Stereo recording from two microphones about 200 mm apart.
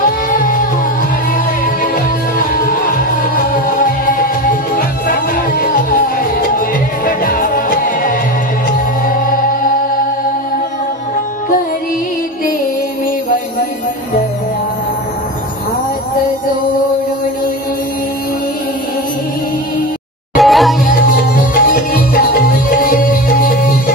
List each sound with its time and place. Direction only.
0.3 s music: 45° left (ahead or behind)
2.3 s music: 45° left (ahead or behind)
20.3 s music: centre (ahead or behind)
20.8 s music: 45° left (ahead or behind)